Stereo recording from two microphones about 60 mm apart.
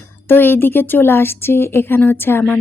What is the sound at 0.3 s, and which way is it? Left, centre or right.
A woman's voice, left.